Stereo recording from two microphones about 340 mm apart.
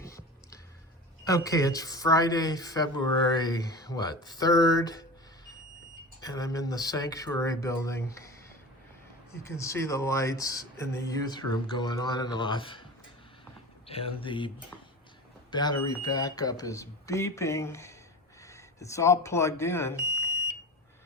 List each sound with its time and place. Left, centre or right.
0.0 s a sound: centre
1.2 s speech: centre
6.1 s speech: centre
9.4 s speech: centre
13.8 s speech: centre
14.7 s a sound: centre
15.4 s speech: centre